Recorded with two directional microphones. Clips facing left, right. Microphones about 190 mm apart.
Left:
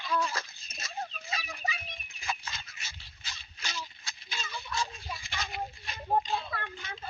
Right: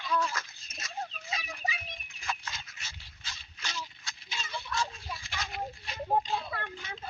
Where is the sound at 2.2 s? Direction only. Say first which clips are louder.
Even; 5° left (ahead or behind).